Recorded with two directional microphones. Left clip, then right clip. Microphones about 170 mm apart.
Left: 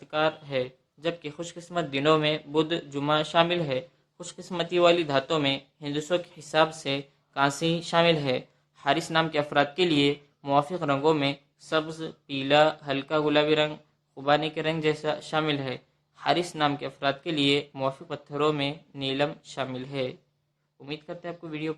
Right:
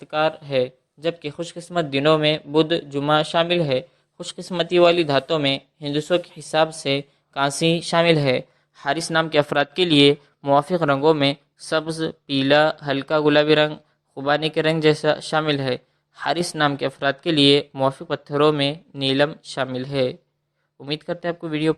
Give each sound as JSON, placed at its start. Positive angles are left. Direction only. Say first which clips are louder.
{"t": 0.0, "sound": "speech", "louder": "right 5 dB", "side_deg": -35}
{"t": 9.3, "sound": "speech", "louder": "right 6 dB", "side_deg": -50}